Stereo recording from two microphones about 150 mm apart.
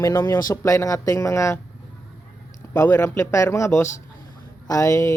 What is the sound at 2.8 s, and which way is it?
Speech, 20° left (ahead or behind).